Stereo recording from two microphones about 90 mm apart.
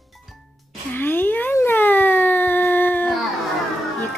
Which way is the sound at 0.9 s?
20° left (ahead or behind).